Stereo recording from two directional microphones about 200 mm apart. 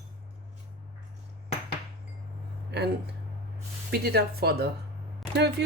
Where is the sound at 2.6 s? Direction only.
55° right (ahead or behind).